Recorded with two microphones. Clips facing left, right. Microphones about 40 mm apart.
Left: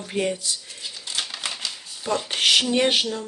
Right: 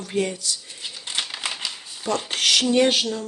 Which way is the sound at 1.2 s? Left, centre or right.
Centre.